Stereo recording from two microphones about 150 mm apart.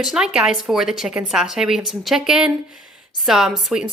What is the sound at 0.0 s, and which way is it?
A woman's voice, 5° right (ahead or behind).